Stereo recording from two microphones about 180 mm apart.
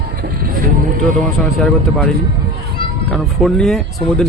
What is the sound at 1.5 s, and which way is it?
Speech, centre (ahead or behind).